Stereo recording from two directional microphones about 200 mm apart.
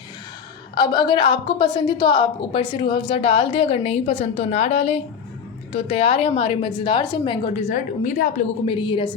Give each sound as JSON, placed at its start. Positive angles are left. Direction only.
{"t": 0.8, "sound": "a woman's voice", "side_deg": 20}
{"t": 7.7, "sound": "a woman's voice", "side_deg": 40}
{"t": 8.7, "sound": "a woman's voice", "side_deg": 25}